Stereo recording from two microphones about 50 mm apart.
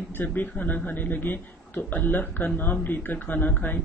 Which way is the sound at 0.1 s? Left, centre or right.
Left.